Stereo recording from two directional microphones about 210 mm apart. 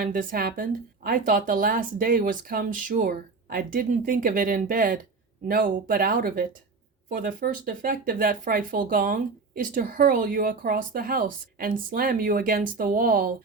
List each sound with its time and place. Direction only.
0.0 s speech: 40° right (ahead or behind)